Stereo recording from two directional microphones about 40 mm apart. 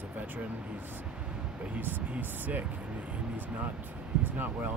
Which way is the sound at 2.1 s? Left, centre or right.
Right.